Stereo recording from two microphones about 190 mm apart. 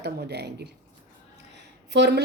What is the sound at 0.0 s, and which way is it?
Speech, 60° right (ahead or behind).